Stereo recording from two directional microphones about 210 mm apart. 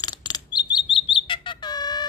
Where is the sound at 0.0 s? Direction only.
20° left (ahead or behind).